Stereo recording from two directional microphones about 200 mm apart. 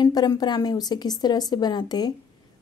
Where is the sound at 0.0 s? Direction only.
20° left (ahead or behind).